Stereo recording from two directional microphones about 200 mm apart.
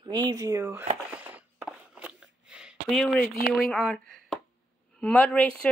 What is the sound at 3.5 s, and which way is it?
Speech, centre (ahead or behind).